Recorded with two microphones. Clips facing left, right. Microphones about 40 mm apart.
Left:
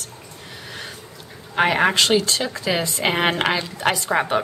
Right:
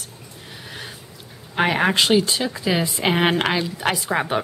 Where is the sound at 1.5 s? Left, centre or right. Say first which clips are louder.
Left 1 dB; centre.